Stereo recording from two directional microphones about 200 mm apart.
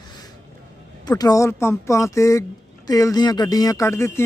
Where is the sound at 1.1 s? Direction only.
20° left (ahead or behind).